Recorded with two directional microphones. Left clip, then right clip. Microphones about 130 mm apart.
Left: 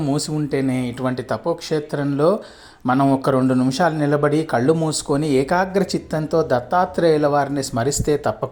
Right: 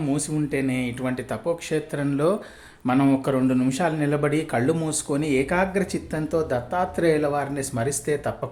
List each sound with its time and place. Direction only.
0.0 s speech: 40° left (ahead or behind)